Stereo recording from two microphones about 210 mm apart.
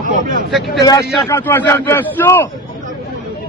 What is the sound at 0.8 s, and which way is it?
A man's voice, 15° left (ahead or behind).